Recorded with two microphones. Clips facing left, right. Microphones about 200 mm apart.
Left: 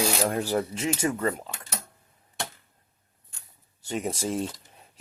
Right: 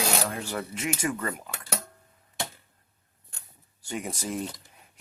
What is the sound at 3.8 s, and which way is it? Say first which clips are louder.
Speech: left 4 dB; 25° left (ahead or behind).